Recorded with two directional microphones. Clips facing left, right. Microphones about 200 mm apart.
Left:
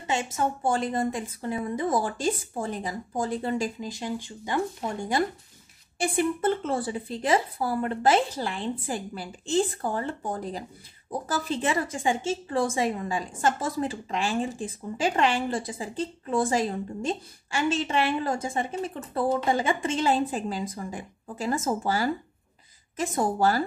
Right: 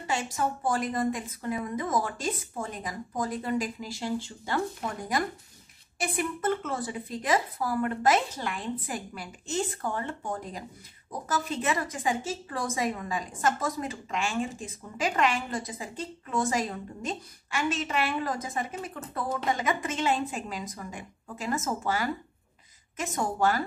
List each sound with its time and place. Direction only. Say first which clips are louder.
0.0 s a woman's voice: left 2 dB; 20° left (ahead or behind)